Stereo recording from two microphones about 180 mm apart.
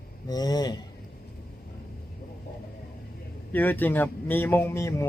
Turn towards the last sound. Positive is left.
turn(degrees=15)  # may be behind; listen again after turning